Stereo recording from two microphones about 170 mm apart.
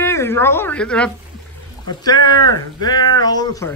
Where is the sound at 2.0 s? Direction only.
25° left (ahead or behind).